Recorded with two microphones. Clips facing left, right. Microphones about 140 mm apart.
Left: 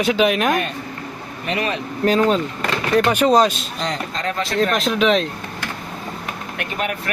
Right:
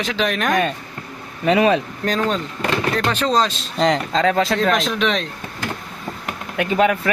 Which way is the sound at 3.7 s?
90° right.